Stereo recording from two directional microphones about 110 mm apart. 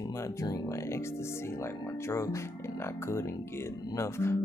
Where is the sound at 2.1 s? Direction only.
25° left (ahead or behind).